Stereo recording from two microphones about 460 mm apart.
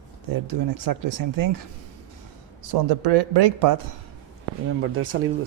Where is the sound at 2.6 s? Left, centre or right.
Right.